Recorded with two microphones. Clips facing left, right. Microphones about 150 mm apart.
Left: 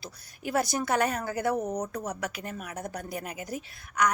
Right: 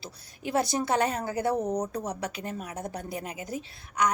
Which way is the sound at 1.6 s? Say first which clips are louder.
Right 2 dB; 10° right (ahead or behind).